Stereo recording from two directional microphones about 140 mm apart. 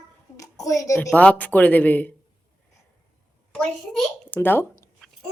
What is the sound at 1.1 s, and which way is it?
Speech, 10° left (ahead or behind).